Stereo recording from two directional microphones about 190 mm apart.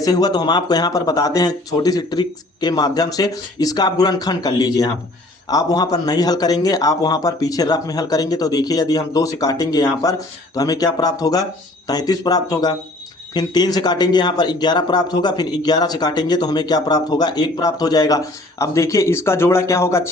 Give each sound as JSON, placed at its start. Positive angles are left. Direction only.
{"t": 0.0, "sound": "speech", "side_deg": 20}